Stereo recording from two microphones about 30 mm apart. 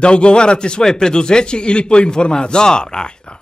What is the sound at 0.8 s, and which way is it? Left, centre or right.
Speech, centre.